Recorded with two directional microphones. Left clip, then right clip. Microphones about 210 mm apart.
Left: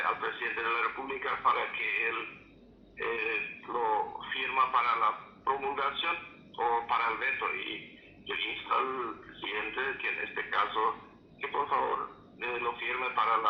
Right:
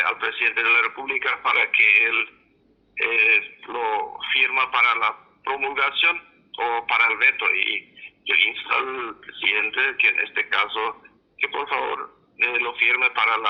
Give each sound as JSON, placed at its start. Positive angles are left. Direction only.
{"t": 0.0, "sound": "speech", "side_deg": -40}